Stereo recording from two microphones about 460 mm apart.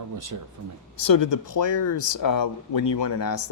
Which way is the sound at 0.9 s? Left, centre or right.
Left.